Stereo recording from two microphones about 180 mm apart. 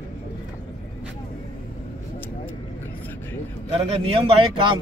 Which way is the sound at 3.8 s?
30° right (ahead or behind).